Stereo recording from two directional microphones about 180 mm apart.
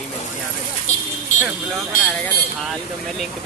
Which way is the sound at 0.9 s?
40° left (ahead or behind).